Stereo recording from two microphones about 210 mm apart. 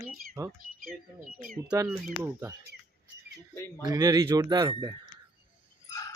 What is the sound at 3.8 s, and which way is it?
Speech, 15° right (ahead or behind).